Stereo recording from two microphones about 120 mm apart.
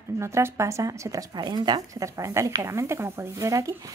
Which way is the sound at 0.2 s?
25° right (ahead or behind).